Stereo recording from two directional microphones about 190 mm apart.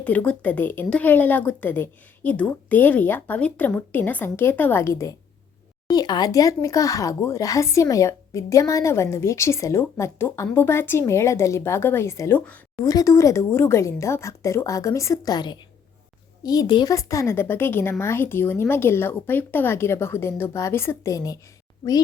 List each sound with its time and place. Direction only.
0.0 s speech: 10° left (ahead or behind)